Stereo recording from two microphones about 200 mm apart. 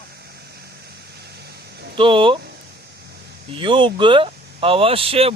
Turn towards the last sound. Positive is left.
turn(degrees=-30)  # may be behind; listen again after turning